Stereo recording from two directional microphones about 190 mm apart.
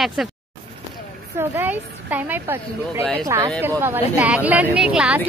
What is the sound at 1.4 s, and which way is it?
Speech, 10° right (ahead or behind).